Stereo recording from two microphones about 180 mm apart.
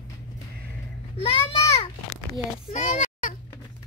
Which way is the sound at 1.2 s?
30° left (ahead or behind).